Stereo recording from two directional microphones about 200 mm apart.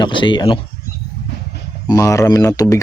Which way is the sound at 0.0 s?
25° left (ahead or behind).